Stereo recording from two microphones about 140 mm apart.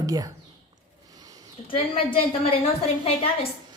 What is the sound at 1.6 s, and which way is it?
Speech, 40° left (ahead or behind).